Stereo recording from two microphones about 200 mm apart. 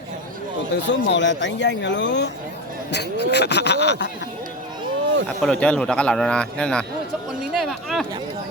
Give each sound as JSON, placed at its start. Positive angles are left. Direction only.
{"t": 0.9, "sound": "speech", "side_deg": 60}
{"t": 5.4, "sound": "a man's voice", "side_deg": 5}